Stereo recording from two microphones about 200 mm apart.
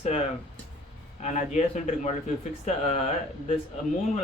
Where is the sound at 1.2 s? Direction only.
35° left (ahead or behind).